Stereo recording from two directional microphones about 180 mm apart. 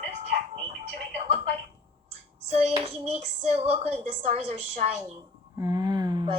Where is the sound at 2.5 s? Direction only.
35° right (ahead or behind).